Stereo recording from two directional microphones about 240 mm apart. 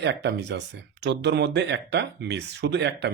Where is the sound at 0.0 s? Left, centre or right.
Right.